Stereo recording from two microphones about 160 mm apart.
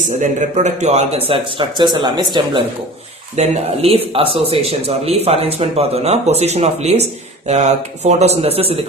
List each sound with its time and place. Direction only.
0.2 s speech: 50° right (ahead or behind)
1.3 s speech: 30° right (ahead or behind)
3.3 s speech: 40° right (ahead or behind)